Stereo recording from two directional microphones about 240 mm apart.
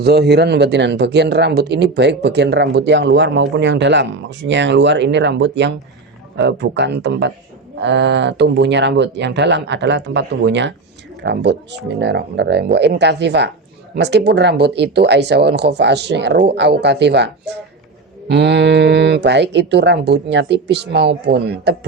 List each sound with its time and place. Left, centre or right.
0.0 s speech: right